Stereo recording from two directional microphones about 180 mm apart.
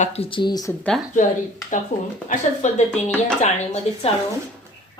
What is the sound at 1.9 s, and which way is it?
Speech, 40° left (ahead or behind).